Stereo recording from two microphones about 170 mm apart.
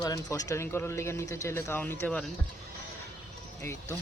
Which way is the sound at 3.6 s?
15° left (ahead or behind).